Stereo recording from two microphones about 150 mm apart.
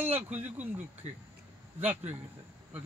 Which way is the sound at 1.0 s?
50° right (ahead or behind).